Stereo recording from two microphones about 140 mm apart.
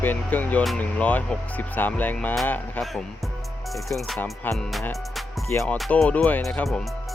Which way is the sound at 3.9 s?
Centre (ahead or behind).